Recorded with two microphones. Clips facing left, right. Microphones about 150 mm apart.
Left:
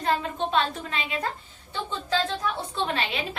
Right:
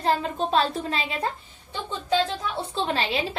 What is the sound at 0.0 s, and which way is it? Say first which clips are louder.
A woman's voice: right 2 dB; 30° right (ahead or behind).